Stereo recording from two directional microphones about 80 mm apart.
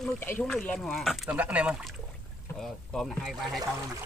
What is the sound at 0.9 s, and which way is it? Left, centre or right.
Speech, centre.